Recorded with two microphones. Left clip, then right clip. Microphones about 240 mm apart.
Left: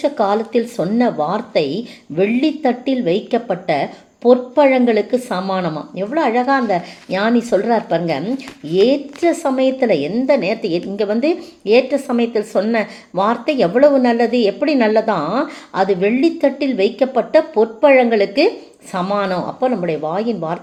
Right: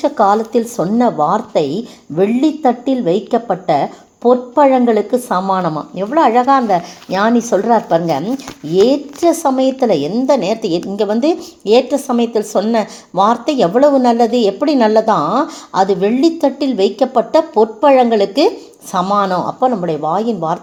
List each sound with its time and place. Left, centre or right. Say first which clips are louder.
0.0 s a woman's voice: right 4 dB; right